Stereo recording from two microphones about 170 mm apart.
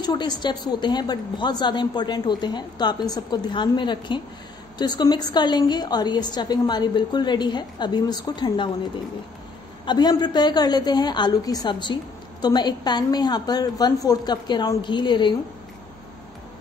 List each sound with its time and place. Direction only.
0.0 s a woman's voice: 25° left (ahead or behind)
9.8 s a woman's voice: 25° left (ahead or behind)